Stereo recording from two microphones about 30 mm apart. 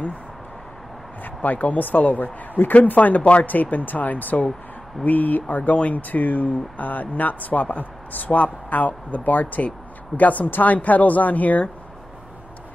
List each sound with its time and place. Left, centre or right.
1.2 s speech: left
3.7 s speech: left
5.8 s speech: left